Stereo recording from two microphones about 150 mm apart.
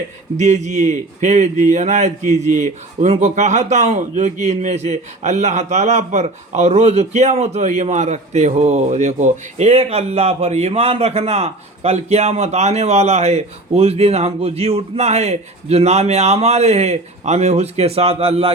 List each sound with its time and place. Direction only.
0.3 s speech: 50° right (ahead or behind)